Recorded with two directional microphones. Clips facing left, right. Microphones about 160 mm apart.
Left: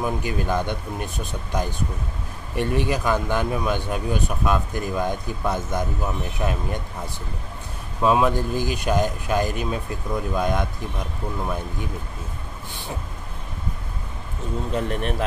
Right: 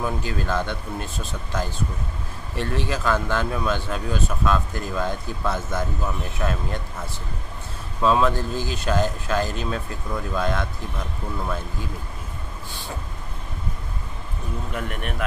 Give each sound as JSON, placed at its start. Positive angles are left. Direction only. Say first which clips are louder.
{"t": 0.0, "sound": "speech", "louder": "left 2 dB", "side_deg": 15}
{"t": 14.7, "sound": "speech", "louder": "left 6 dB", "side_deg": 30}